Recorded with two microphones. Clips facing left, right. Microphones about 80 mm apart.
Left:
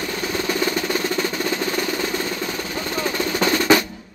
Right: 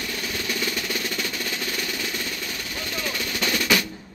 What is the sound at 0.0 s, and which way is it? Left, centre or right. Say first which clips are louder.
Music: left 6 dB; left.